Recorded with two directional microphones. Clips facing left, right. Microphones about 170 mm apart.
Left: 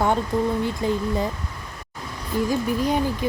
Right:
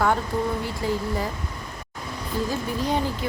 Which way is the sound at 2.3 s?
15° left (ahead or behind).